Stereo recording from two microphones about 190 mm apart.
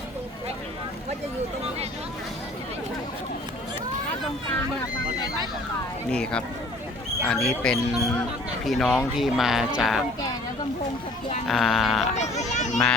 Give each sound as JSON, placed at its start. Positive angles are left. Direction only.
{"t": 6.1, "sound": "speech", "side_deg": 5}
{"t": 11.4, "sound": "speech", "side_deg": 0}
{"t": 12.1, "sound": "speech", "side_deg": 35}